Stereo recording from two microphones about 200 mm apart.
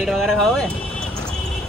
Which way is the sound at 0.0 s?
Centre (ahead or behind).